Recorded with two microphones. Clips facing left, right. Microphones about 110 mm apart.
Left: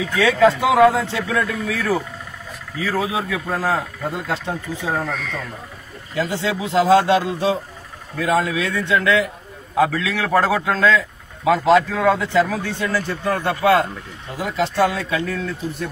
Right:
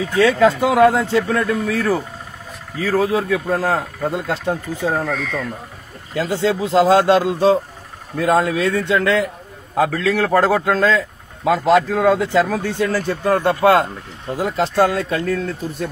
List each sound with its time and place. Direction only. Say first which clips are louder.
0.0 s speech: right 1 dB; 45° right (ahead or behind)